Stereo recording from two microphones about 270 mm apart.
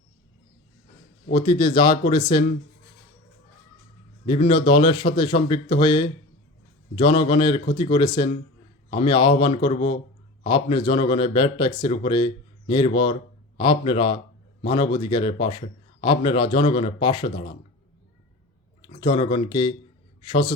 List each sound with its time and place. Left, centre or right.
1.3 s a man's voice: centre
4.3 s a man's voice: centre
18.9 s a man's voice: centre